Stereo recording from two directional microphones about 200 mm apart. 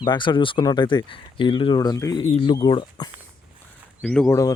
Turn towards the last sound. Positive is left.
turn(degrees=5)  # may be behind; listen again after turning